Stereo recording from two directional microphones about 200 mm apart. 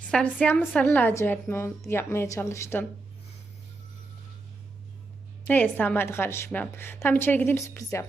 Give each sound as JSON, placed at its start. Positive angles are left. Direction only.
{"t": 0.0, "sound": "a woman's voice", "side_deg": 5}
{"t": 5.5, "sound": "a woman's voice", "side_deg": 10}